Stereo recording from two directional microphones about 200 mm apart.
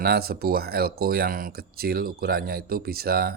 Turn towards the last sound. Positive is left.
turn(degrees=-50)  # may be behind; listen again after turning